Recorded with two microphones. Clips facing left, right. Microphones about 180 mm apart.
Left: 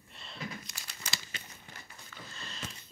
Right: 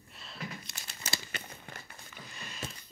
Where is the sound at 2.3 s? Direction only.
15° right (ahead or behind).